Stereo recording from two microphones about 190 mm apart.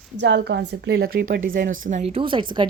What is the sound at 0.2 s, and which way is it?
Speech, 65° right (ahead or behind).